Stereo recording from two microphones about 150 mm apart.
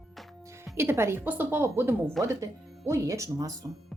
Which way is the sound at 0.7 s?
15° right (ahead or behind).